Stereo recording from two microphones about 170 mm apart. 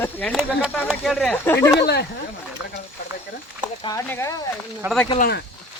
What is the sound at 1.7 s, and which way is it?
Speech, 75° left (ahead or behind).